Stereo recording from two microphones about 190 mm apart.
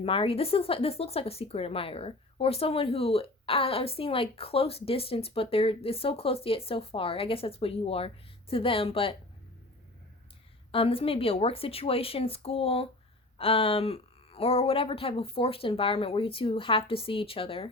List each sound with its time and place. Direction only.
0.0 s speech: 30° left (ahead or behind)
10.7 s speech: 30° left (ahead or behind)